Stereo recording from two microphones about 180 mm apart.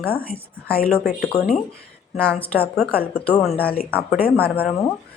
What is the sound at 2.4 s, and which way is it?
A woman's voice, 10° left (ahead or behind).